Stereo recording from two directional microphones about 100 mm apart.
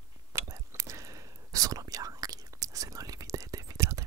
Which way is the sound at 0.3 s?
35° right (ahead or behind).